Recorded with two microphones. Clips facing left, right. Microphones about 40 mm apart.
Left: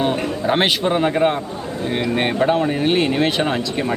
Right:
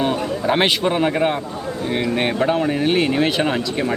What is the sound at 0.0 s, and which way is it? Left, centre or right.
A man's voice, centre.